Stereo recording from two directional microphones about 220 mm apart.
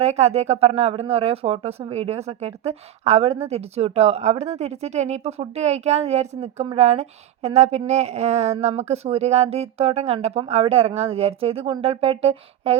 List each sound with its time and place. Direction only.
0.0 s speech: 30° right (ahead or behind)